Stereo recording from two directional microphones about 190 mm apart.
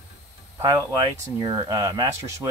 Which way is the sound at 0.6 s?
20° right (ahead or behind).